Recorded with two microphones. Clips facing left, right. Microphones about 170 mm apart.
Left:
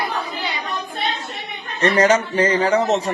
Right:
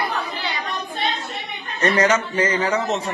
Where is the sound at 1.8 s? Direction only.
30° left (ahead or behind).